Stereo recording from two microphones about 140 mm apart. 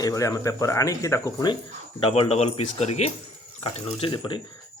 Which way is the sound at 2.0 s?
35° left (ahead or behind).